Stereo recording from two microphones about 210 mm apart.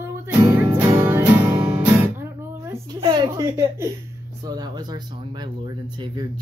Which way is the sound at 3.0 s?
20° right (ahead or behind).